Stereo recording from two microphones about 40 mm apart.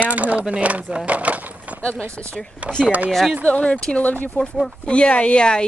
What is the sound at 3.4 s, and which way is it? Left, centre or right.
Speech, left.